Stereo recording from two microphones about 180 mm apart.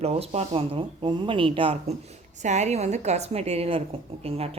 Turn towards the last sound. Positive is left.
turn(degrees=-35)  # may be behind; listen again after turning